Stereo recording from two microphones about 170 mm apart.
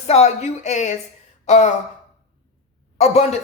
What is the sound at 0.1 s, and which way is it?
A woman's voice, 40° left (ahead or behind).